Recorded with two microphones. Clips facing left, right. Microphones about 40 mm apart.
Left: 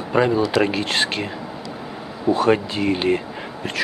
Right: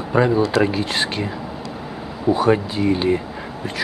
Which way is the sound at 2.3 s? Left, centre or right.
Left.